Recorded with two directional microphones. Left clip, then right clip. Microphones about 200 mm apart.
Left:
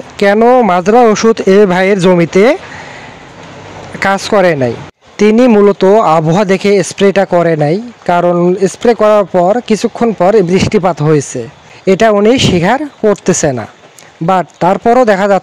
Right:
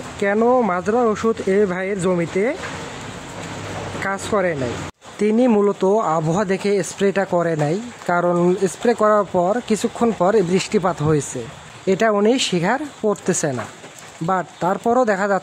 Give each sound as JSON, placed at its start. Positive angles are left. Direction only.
{"t": 0.2, "sound": "speech", "side_deg": 40}
{"t": 4.0, "sound": "speech", "side_deg": 40}